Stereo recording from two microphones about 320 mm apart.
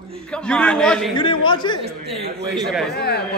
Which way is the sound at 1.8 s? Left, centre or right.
Centre.